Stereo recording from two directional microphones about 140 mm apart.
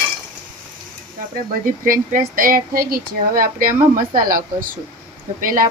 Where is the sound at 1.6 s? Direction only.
75° right (ahead or behind).